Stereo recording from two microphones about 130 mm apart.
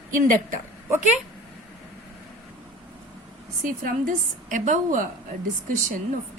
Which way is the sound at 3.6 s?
90° right.